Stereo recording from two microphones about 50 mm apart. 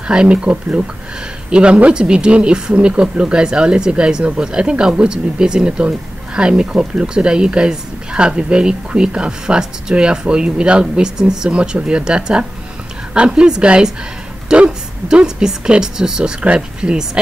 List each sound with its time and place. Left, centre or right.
0.0 s a woman's voice: right